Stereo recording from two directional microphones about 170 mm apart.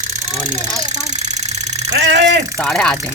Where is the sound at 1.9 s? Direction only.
90° right.